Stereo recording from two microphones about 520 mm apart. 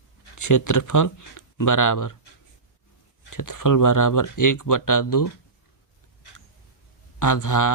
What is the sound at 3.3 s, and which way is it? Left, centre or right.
Speech, left.